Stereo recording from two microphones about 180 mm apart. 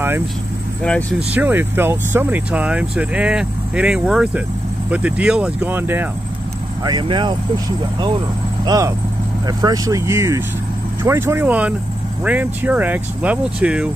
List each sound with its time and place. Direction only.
1.3 s speech: 10° right (ahead or behind)
6.8 s speech: 25° right (ahead or behind)
8.6 s speech: 20° right (ahead or behind)